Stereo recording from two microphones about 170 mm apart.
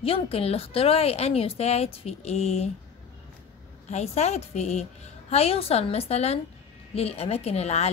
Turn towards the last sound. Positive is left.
turn(degrees=40)  # may be behind; listen again after turning